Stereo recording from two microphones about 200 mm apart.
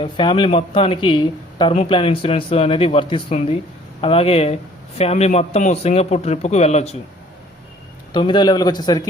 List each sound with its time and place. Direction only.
0.0 s a man's voice: 25° left (ahead or behind)
8.1 s speech: 25° left (ahead or behind)